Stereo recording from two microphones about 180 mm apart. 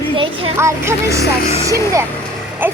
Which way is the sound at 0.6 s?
15° right (ahead or behind).